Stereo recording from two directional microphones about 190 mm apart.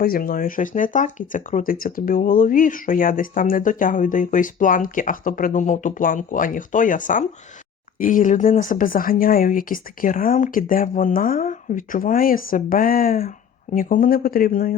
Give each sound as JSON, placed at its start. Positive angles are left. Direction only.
{"t": 0.0, "sound": "speech", "side_deg": 50}